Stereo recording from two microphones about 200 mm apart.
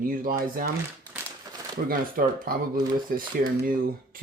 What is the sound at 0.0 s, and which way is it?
Speech, 45° right (ahead or behind).